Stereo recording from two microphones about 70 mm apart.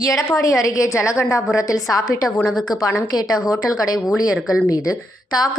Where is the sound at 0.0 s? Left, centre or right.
Left.